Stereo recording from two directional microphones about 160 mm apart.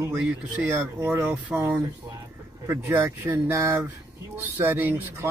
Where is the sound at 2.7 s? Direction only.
15° right (ahead or behind).